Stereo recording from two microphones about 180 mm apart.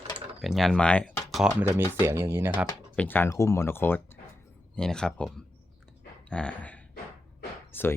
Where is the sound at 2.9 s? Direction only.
10° left (ahead or behind).